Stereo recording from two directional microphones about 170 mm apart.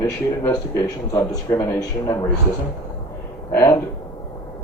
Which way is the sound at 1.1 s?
20° left (ahead or behind).